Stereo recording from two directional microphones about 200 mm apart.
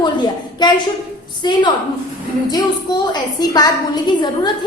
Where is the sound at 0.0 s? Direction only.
20° left (ahead or behind).